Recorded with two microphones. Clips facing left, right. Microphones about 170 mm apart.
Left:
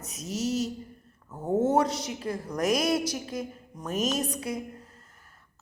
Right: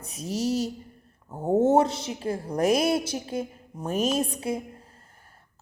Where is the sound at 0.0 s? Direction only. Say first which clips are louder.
Right 3 dB; 30° right (ahead or behind).